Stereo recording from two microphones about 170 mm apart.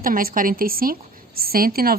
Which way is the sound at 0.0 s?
55° right (ahead or behind).